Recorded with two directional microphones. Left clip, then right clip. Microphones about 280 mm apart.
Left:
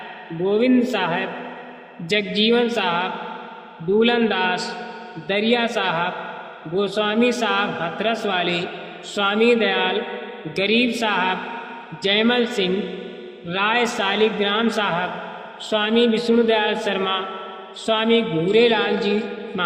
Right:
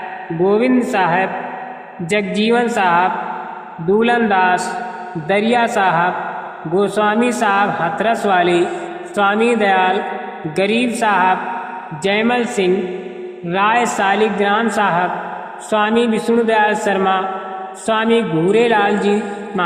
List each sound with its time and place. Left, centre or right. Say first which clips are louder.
0.4 s a man's voice: right 4 dB; right